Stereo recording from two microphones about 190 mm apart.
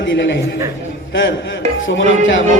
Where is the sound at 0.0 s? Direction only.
70° left (ahead or behind).